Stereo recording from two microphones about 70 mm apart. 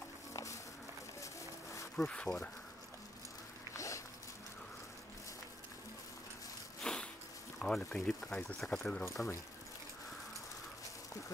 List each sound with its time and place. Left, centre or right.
0.3 s music: left
1.2 s a sound: left
2.0 s speech: centre
3.7 s dog: left
6.8 s a sound: centre
7.9 s speech: centre
9.0 s speech: left